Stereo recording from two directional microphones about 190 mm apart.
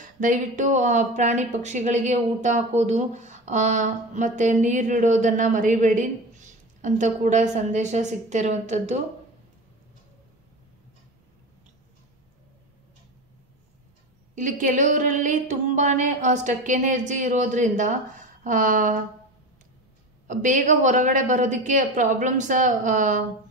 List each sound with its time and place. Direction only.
0.0 s speech: 45° right (ahead or behind)
14.3 s speech: 45° right (ahead or behind)
20.2 s speech: 40° right (ahead or behind)